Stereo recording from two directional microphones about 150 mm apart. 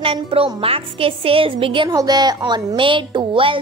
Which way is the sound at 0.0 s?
40° right (ahead or behind).